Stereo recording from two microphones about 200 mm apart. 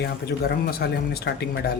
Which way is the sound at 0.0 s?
50° left (ahead or behind).